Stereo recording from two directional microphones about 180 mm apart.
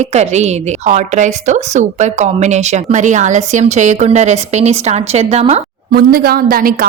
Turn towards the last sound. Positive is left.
turn(degrees=-55)  # may be behind; listen again after turning